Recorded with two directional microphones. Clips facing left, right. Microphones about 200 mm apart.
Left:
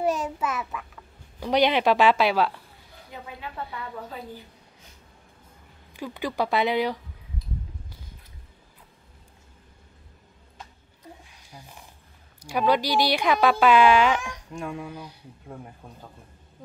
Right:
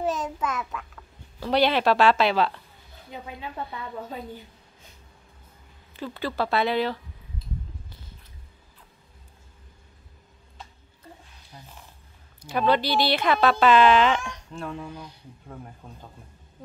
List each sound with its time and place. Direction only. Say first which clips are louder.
0.0 s speech: left 2 dB; 10° left (ahead or behind)
1.4 s speech: left 1 dB; 15° left (ahead or behind)
3.1 s speech: right 2 dB; 20° right (ahead or behind)
5.9 s speech: left 1 dB; 15° left (ahead or behind)
11.5 s speech: left 1 dB; 10° left (ahead or behind)